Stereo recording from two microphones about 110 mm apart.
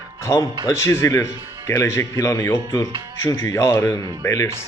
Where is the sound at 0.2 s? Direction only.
25° left (ahead or behind).